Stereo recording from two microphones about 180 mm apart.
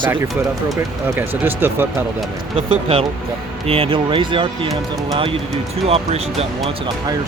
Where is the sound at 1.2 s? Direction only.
10° right (ahead or behind).